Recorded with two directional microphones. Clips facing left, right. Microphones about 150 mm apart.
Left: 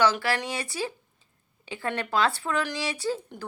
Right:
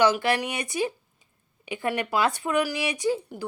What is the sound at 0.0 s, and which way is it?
Speech, 15° right (ahead or behind).